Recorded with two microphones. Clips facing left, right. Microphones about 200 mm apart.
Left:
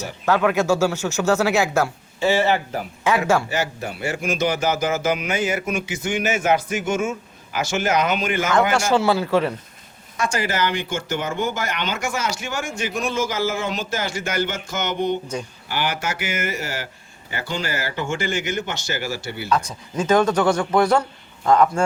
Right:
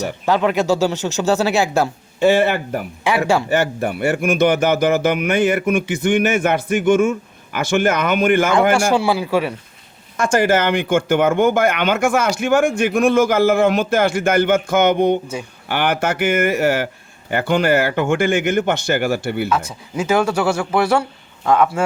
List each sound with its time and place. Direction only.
0.3 s speech: 15° right (ahead or behind)
2.1 s speech: 60° right (ahead or behind)
3.0 s speech: 15° right (ahead or behind)
3.5 s speech: 55° right (ahead or behind)
8.9 s speech: 15° right (ahead or behind)
10.2 s speech: 50° right (ahead or behind)
19.5 s speech: 5° right (ahead or behind)